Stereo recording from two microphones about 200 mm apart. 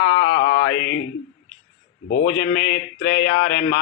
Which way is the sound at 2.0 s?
60° left (ahead or behind).